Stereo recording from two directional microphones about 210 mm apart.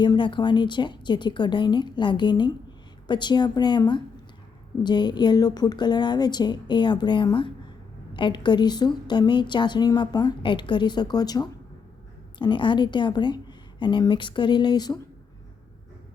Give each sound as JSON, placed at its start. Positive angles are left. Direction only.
{"t": 0.0, "sound": "a woman's voice", "side_deg": 20}